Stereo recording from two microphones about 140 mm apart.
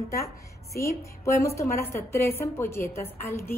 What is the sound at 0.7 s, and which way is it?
A woman's voice, 20° left (ahead or behind).